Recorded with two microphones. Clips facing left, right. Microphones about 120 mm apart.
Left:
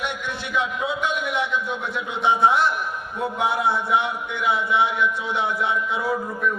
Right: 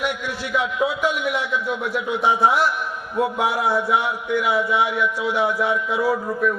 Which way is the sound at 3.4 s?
25° left (ahead or behind).